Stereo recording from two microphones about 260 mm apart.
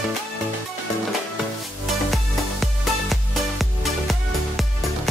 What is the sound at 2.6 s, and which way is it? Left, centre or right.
Music, centre.